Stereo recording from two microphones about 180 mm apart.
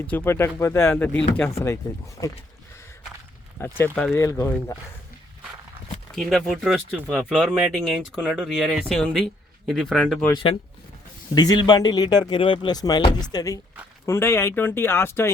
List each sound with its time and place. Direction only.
0.1 s speech: 10° left (ahead or behind)
3.6 s speech: 10° left (ahead or behind)
6.1 s speech: centre (ahead or behind)
11.3 s speech: 20° left (ahead or behind)